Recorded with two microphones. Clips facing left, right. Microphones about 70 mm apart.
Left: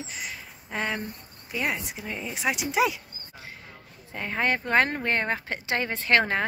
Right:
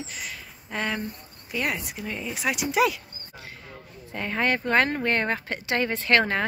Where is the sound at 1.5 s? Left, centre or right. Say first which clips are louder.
Right 1 dB; centre.